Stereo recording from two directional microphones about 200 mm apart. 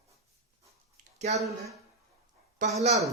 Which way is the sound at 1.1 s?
35° right (ahead or behind).